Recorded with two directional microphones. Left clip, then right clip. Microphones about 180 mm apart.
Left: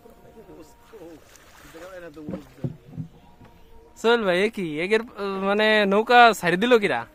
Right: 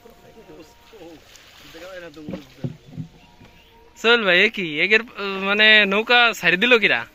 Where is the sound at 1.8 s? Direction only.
10° right (ahead or behind).